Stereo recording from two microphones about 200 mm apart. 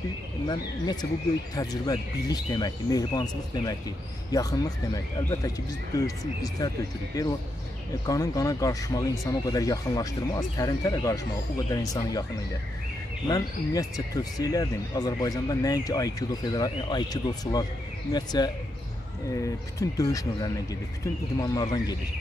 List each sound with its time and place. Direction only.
1.5 s speech: 20° left (ahead or behind)
8.1 s speech: 15° left (ahead or behind)
13.3 s speech: 20° left (ahead or behind)